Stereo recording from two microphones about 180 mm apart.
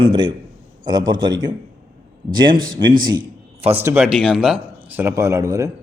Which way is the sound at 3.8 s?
10° right (ahead or behind).